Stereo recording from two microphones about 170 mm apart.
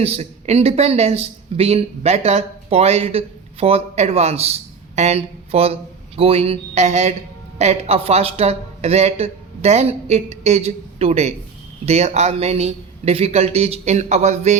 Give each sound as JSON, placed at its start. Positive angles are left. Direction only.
{"t": 0.0, "sound": "speech", "side_deg": -40}